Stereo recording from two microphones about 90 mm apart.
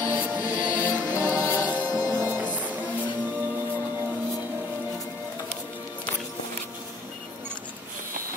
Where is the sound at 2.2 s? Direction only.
20° right (ahead or behind).